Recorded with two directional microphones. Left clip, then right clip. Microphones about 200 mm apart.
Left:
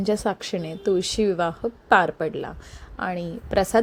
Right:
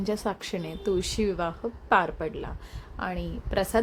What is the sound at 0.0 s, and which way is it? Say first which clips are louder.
Speech: left 6 dB; 20° left (ahead or behind).